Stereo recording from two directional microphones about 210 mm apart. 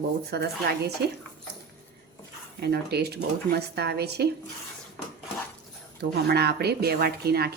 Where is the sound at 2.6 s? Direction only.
50° right (ahead or behind).